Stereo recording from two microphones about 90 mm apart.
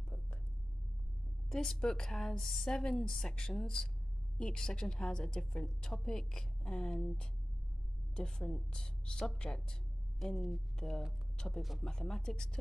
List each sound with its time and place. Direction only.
1.5 s a woman's voice: 5° left (ahead or behind)